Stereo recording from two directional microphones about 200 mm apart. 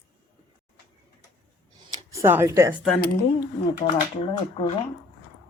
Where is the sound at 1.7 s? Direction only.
15° right (ahead or behind).